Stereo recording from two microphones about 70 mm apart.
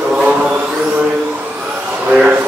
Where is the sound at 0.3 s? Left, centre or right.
Right.